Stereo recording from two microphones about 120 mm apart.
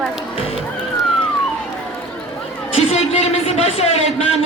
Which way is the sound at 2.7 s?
55° left (ahead or behind).